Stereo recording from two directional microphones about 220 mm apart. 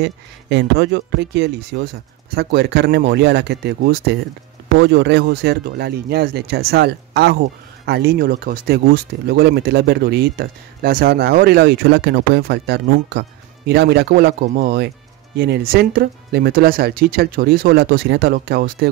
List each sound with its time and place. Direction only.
0.0 s speech: 50° right (ahead or behind)